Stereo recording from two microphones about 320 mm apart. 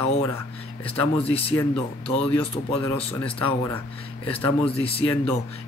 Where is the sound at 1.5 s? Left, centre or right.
Centre.